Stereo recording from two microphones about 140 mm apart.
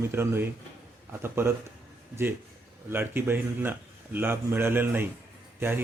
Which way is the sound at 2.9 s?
15° right (ahead or behind).